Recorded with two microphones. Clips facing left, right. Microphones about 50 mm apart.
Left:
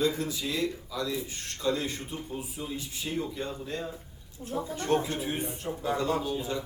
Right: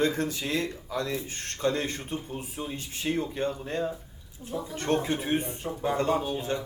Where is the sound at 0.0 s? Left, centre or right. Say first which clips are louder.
Right 2 dB; right.